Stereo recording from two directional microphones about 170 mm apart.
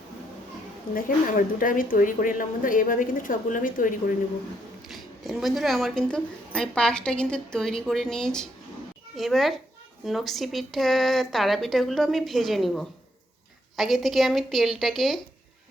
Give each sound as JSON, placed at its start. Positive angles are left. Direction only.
{"t": 0.9, "sound": "a woman's voice", "side_deg": 55}
{"t": 4.9, "sound": "speech", "side_deg": 0}